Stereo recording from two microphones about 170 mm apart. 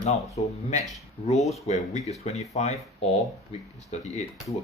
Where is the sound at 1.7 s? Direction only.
45° left (ahead or behind).